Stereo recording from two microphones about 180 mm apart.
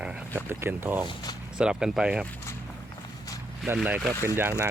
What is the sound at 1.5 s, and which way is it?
Speech, 5° right (ahead or behind).